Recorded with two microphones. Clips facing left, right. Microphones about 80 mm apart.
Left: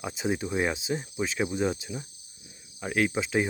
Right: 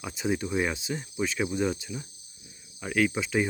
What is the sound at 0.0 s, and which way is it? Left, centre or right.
Speech, left.